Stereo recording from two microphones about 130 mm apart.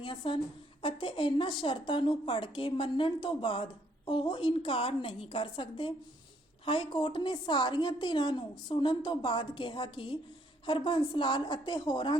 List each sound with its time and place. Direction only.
0.0 s a woman's voice: 40° left (ahead or behind)